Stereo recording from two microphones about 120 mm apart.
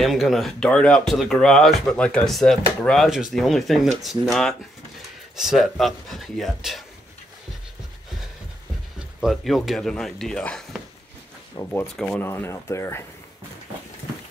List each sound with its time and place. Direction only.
0.0 s speech: centre (ahead or behind)
9.2 s speech: centre (ahead or behind)
11.8 s speech: 10° left (ahead or behind)